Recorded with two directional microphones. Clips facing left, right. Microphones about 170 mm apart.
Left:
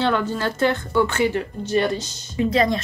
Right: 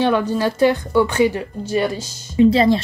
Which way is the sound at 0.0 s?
15° right (ahead or behind).